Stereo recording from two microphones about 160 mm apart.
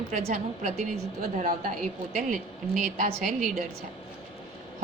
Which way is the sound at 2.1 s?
55° right (ahead or behind).